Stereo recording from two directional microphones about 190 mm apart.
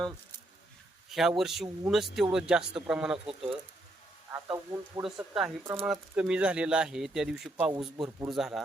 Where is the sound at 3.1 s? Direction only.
30° right (ahead or behind).